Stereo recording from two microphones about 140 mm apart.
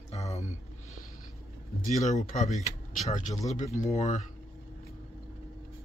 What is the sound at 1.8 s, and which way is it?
Speech, 60° left (ahead or behind).